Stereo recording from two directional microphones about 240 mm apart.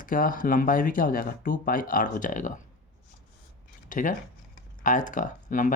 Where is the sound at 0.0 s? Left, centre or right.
Left.